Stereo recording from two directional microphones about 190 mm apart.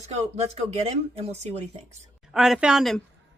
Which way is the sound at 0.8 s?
35° right (ahead or behind).